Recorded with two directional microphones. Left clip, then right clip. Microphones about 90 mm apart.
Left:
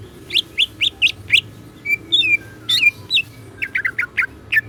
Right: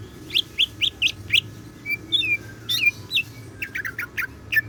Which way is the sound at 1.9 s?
45° left (ahead or behind).